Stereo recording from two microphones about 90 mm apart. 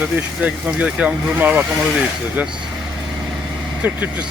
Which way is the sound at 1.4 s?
20° right (ahead or behind).